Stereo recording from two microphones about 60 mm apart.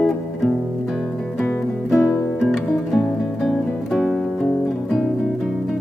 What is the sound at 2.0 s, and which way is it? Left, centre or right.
Music, left.